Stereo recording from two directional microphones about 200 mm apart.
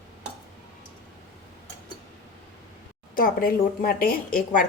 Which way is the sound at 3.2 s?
45° left (ahead or behind).